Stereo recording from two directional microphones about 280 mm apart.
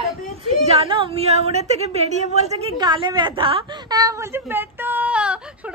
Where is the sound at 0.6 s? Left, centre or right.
Centre.